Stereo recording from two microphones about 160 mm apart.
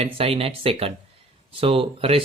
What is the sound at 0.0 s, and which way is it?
Speech, 35° right (ahead or behind).